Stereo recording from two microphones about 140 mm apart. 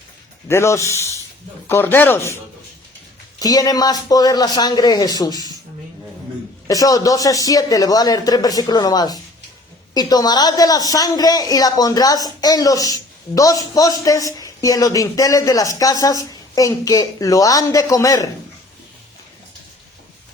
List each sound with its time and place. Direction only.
0.4 s speech: 20° left (ahead or behind)
6.7 s speech: 25° left (ahead or behind)